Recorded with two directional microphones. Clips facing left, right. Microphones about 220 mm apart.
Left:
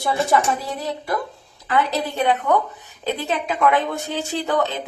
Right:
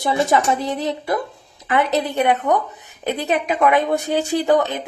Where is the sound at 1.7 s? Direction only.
20° right (ahead or behind).